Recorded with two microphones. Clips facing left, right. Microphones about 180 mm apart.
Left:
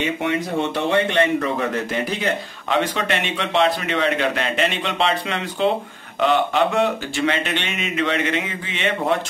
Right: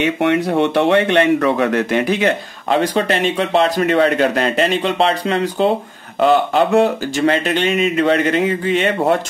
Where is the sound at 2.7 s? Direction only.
40° right (ahead or behind).